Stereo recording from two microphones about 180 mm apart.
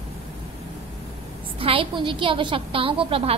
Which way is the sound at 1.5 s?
30° right (ahead or behind).